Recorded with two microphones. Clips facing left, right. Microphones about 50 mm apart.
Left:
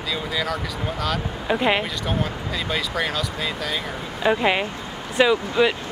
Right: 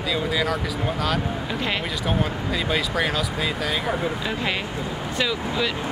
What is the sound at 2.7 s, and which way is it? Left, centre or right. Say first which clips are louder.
Speech: even; centre.